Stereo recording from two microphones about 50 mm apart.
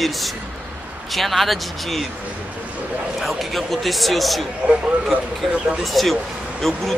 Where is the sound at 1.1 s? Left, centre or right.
Centre.